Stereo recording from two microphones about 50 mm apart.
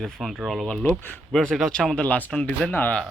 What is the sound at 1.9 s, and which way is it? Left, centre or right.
Speech, left.